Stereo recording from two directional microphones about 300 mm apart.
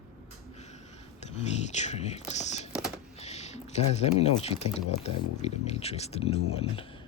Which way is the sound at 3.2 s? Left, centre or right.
Left.